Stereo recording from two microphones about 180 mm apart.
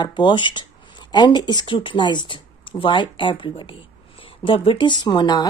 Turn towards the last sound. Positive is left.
turn(degrees=25)  # may be behind; listen again after turning